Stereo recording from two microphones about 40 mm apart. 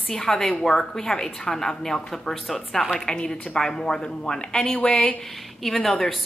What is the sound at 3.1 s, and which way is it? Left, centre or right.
Speech, left.